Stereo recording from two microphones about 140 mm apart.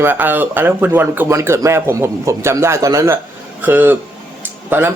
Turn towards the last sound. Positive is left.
turn(degrees=-15)  # may be behind; listen again after turning